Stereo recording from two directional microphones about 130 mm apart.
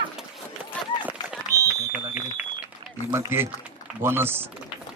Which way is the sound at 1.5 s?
25° right (ahead or behind).